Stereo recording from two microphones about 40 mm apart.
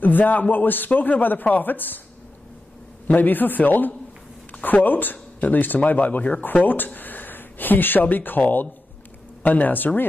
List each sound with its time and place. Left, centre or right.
0.0 s a man's voice: left
3.1 s a man's voice: left